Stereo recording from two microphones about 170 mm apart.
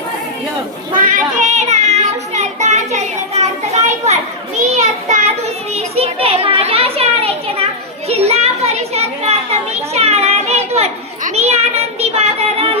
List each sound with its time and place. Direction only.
0.9 s child singing: 50° right (ahead or behind)
4.7 s children playing: 45° right (ahead or behind)